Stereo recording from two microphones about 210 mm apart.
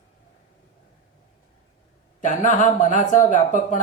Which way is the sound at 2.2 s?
35° left (ahead or behind).